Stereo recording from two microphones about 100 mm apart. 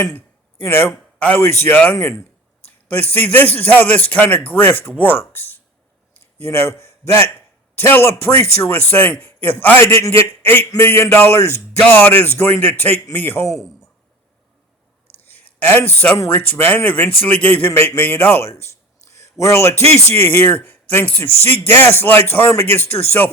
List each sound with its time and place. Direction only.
0.6 s a man's voice: 25° left (ahead or behind)
9.8 s a man's voice: 30° left (ahead or behind)
15.3 s a man's voice: 15° left (ahead or behind)
19.1 s a sound: 30° left (ahead or behind)
20.1 s a man's voice: 20° left (ahead or behind)